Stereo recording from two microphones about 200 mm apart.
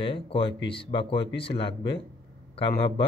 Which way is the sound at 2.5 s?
25° left (ahead or behind).